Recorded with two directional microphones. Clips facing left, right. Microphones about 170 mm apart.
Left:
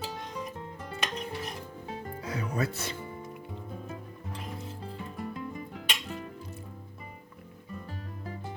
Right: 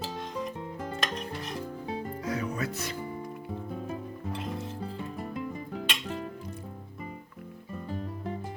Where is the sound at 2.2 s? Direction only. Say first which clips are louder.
Left 1 dB; 30° left (ahead or behind).